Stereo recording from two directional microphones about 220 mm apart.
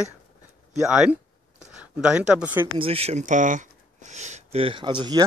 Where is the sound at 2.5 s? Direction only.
20° right (ahead or behind).